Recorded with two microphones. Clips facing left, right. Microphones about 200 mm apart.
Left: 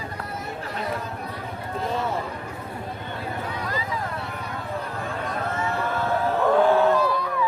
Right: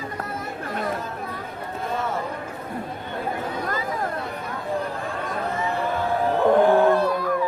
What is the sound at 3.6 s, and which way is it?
Vehicle, 50° right (ahead or behind).